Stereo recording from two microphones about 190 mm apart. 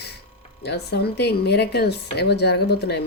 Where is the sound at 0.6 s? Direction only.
60° left (ahead or behind).